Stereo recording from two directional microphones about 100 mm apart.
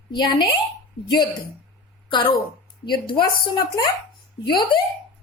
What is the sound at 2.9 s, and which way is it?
A woman's voice, 55° left (ahead or behind).